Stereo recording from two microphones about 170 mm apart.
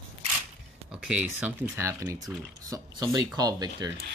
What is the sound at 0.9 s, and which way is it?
Speech, 5° right (ahead or behind).